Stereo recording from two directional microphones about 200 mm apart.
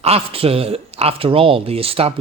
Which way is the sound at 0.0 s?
30° right (ahead or behind).